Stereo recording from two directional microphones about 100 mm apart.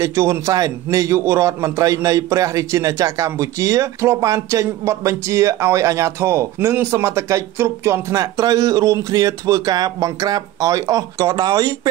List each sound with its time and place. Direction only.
0.0 s a man's voice: 30° right (ahead or behind)